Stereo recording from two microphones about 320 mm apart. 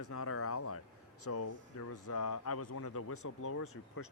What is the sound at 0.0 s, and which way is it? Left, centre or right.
Speech, left.